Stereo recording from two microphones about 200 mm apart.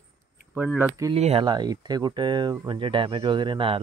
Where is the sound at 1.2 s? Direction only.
30° right (ahead or behind).